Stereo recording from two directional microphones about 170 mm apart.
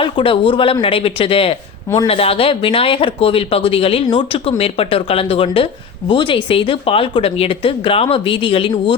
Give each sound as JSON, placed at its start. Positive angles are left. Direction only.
{"t": 0.0, "sound": "speech", "side_deg": 30}